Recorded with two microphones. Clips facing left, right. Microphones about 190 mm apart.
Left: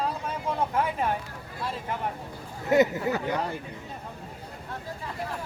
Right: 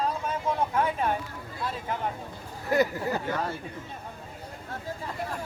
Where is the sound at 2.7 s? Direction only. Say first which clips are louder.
Left 3 dB; 20° left (ahead or behind).